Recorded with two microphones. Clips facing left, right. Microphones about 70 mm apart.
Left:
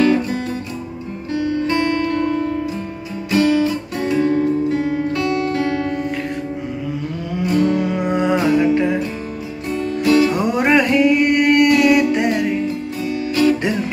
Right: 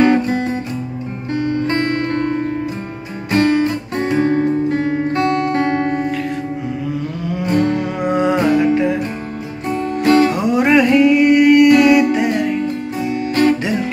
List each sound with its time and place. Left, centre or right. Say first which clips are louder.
0.0 s music: right 3 dB; right
3.3 s music: right 1 dB; right
7.4 s music: even; right
8.0 s music: right 2 dB; centre
8.5 s music: even; right
8.7 s music: right 1 dB; centre
9.7 s music: right 2 dB; right
10.3 s music: right 2 dB; centre
13.3 s music: right 1 dB; right